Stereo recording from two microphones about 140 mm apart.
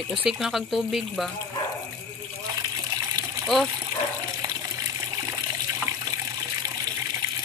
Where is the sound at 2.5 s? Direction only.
25° right (ahead or behind).